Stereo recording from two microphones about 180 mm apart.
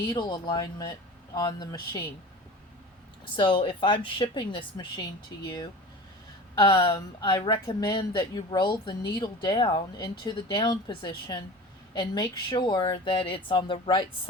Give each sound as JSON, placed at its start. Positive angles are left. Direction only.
{"t": 0.1, "sound": "speech", "side_deg": 25}
{"t": 3.3, "sound": "speech", "side_deg": 30}
{"t": 6.6, "sound": "speech", "side_deg": 30}